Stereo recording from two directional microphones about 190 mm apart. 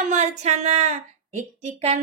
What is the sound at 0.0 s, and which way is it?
Speech, 40° right (ahead or behind).